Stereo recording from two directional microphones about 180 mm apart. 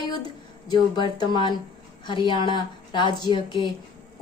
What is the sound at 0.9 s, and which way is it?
A woman's voice, 25° left (ahead or behind).